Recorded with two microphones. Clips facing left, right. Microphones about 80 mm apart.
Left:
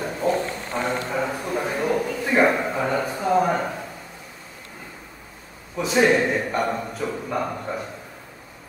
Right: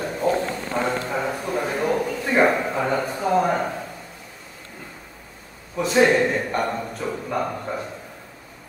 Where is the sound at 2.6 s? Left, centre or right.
Centre.